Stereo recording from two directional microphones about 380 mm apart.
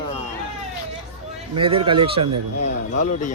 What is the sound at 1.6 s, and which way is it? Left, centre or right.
Speech, centre.